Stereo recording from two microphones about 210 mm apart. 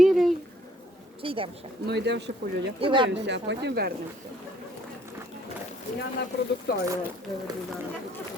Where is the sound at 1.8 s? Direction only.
55° right (ahead or behind).